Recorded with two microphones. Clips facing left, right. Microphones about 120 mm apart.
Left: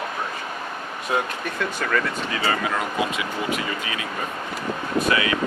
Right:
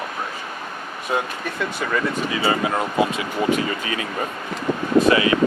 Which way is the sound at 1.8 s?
10° right (ahead or behind).